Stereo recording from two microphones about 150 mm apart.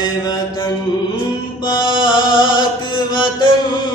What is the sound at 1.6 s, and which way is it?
Chant, 30° left (ahead or behind).